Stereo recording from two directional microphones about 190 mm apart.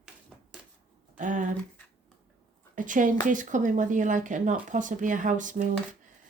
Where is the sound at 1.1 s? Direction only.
40° right (ahead or behind).